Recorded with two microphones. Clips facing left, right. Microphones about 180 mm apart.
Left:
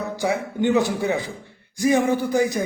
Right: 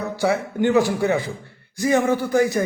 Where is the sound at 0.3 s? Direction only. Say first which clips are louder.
Even; 20° left (ahead or behind).